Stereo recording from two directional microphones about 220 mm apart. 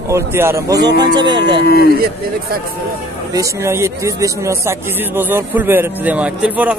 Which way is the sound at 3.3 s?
15° right (ahead or behind).